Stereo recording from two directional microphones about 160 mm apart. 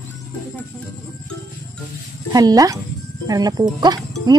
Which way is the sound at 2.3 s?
25° right (ahead or behind).